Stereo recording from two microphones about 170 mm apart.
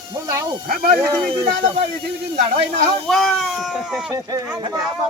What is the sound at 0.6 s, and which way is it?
Speech, 60° right (ahead or behind).